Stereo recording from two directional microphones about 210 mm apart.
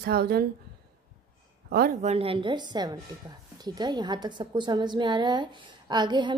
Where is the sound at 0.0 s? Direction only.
50° right (ahead or behind).